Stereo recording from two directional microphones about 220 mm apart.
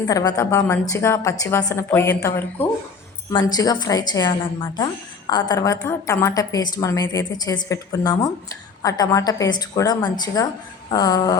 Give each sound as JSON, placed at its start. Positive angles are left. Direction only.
{"t": 0.0, "sound": "a woman's voice", "side_deg": 15}